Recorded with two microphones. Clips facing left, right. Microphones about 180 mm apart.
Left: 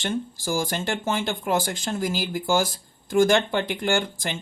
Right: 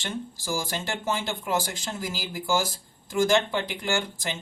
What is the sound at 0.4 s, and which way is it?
Speech, 55° left (ahead or behind).